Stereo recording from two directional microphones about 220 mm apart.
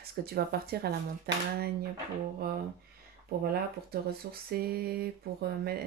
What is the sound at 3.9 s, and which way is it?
Speech, 45° right (ahead or behind).